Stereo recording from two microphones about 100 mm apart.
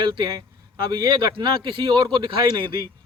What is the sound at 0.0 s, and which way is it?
Speech, 50° right (ahead or behind).